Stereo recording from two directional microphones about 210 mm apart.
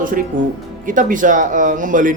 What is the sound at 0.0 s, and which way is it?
A man's voice, 40° right (ahead or behind).